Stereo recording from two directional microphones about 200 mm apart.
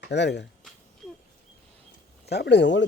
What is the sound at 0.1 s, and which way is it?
Speech, 60° left (ahead or behind).